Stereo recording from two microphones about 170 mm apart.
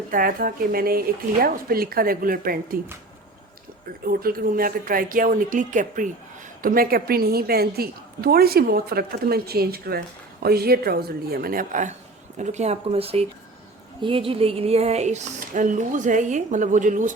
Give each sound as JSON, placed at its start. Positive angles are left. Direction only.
{"t": 0.1, "sound": "a woman's voice", "side_deg": -55}
{"t": 4.0, "sound": "a woman's voice", "side_deg": -60}